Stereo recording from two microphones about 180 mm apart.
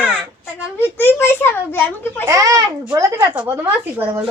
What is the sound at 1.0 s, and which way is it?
Speech, 10° left (ahead or behind).